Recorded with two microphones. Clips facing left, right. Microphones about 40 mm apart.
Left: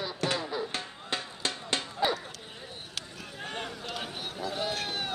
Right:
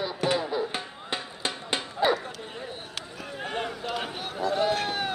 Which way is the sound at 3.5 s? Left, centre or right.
Centre.